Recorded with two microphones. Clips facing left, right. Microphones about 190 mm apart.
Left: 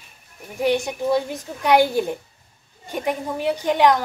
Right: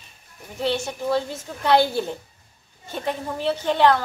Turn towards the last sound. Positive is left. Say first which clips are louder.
# left 1 dB
turn(degrees=15)  # may be behind; listen again after turning